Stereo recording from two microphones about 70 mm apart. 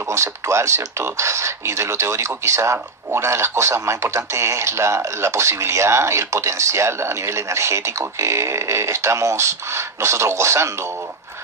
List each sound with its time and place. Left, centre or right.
0.0 s speech: right